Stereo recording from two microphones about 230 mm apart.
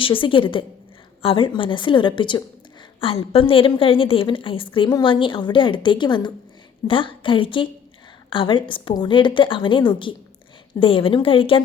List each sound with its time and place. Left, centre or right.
0.0 s a woman's voice: left